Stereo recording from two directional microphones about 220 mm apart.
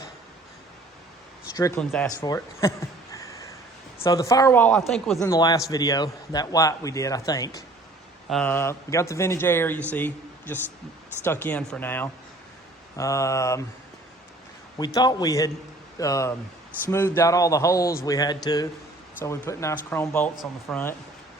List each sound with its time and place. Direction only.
1.5 s a man's voice: 15° left (ahead or behind)
1.8 s speech: 5° left (ahead or behind)
2.0 s a man's voice: 15° left (ahead or behind); by 5.2 s centre (ahead or behind)
5.2 s a man's voice: 15° left (ahead or behind)
8.3 s a man's voice: 5° left (ahead or behind)
14.8 s a man's voice: 15° left (ahead or behind)